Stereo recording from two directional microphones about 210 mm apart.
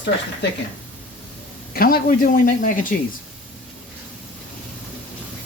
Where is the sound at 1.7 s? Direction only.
45° left (ahead or behind).